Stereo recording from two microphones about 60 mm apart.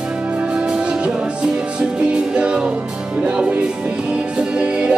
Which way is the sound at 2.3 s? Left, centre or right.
Centre.